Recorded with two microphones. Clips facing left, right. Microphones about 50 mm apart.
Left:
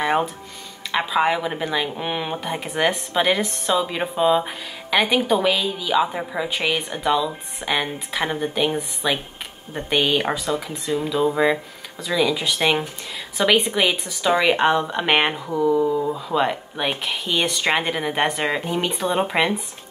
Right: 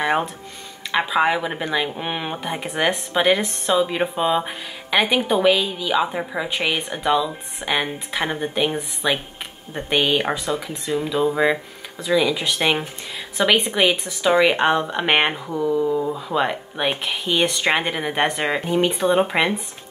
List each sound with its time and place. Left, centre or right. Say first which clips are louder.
0.9 s speech: right 1 dB; centre
13.4 s mantra: even; centre
13.8 s speech: right 2 dB; centre
15.5 s mantra: left 3 dB; centre
16.2 s speech: even; centre